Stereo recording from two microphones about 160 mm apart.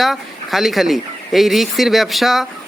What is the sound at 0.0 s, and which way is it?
Speech, centre (ahead or behind).